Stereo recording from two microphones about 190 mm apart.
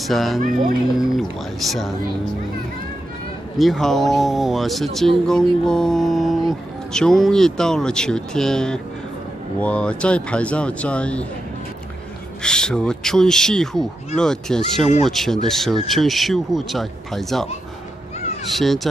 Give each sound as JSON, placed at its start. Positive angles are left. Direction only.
{"t": 0.0, "sound": "speech", "side_deg": 0}
{"t": 0.4, "sound": "speech", "side_deg": -45}
{"t": 0.9, "sound": "speech", "side_deg": 0}
{"t": 3.5, "sound": "speech", "side_deg": 0}
{"t": 12.4, "sound": "speech", "side_deg": 5}